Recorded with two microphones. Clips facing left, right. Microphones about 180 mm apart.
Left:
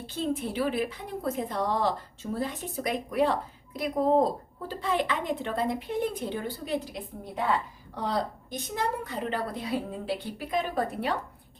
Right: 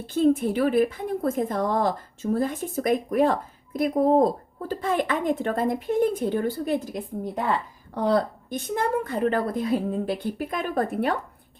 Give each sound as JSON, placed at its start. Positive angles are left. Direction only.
{"t": 0.1, "sound": "a woman's voice", "side_deg": -50}